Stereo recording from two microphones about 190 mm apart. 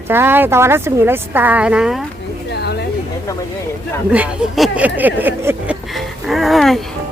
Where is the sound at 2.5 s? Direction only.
60° left (ahead or behind).